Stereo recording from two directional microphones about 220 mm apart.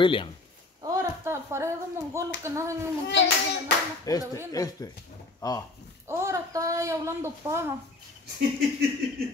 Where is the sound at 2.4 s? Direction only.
15° right (ahead or behind).